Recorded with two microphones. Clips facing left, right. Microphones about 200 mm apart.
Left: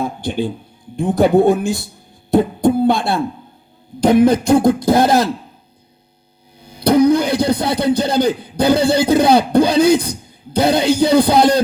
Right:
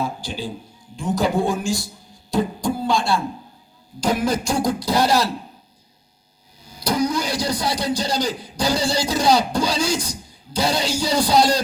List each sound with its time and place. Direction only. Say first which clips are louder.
0.0 s beatboxing: left 7 dB; 55° left (ahead or behind)
6.6 s speech: left 9 dB; 60° left (ahead or behind)